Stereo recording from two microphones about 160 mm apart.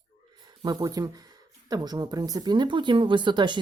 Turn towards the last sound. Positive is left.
turn(degrees=-30)  # may be behind; listen again after turning